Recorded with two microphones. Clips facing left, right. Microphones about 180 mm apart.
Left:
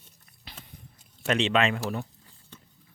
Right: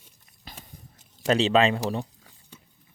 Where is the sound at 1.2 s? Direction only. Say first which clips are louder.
Right 4 dB; 35° right (ahead or behind).